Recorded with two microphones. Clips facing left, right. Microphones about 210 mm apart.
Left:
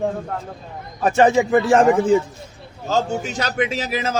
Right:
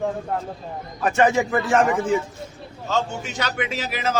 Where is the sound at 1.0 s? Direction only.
30° left (ahead or behind).